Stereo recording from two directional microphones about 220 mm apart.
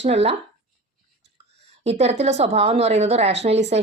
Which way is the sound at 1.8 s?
30° right (ahead or behind).